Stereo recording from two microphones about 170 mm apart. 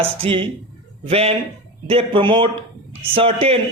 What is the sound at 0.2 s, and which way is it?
A man's voice, 30° right (ahead or behind).